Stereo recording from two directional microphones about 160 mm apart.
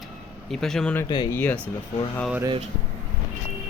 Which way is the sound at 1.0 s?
30° left (ahead or behind).